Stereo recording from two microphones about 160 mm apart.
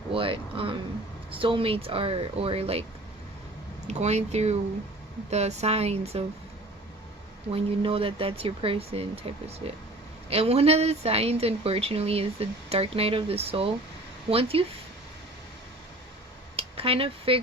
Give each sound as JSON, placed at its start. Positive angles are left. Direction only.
{"t": 0.1, "sound": "a woman's voice", "side_deg": -35}
{"t": 3.8, "sound": "a woman's voice", "side_deg": -45}
{"t": 7.5, "sound": "a woman's voice", "side_deg": -35}
{"t": 16.6, "sound": "speech", "side_deg": -35}